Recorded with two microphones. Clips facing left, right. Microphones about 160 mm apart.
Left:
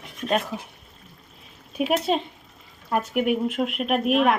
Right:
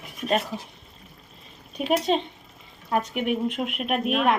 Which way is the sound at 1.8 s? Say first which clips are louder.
Even; 5° left (ahead or behind).